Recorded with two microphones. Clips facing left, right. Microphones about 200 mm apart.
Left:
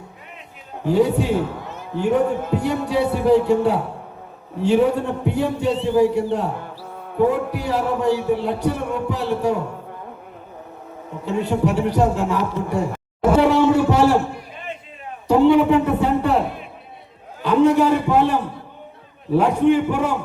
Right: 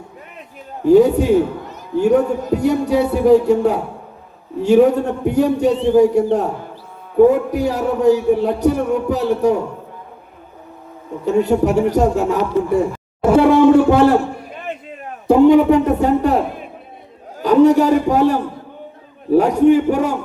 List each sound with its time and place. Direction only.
0.9 s a man's voice: 45° right (ahead or behind)
11.3 s a man's voice: 45° right (ahead or behind)
13.3 s a sound: 55° right (ahead or behind)
15.3 s a man's voice: 45° right (ahead or behind)
17.4 s a man's voice: 40° right (ahead or behind)